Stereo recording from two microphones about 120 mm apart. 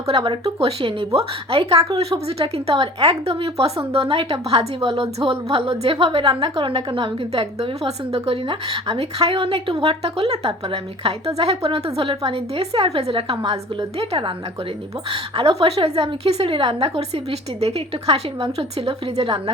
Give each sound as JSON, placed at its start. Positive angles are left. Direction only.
{"t": 0.1, "sound": "a woman's voice", "side_deg": -50}
{"t": 3.2, "sound": "a woman's voice", "side_deg": -55}
{"t": 15.1, "sound": "a woman's voice", "side_deg": -50}